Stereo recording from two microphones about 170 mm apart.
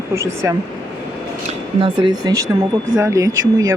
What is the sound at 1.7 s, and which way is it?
Speech, 30° right (ahead or behind).